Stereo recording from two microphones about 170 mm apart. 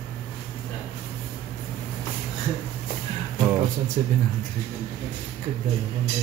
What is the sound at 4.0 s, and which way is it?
Speech, 45° right (ahead or behind).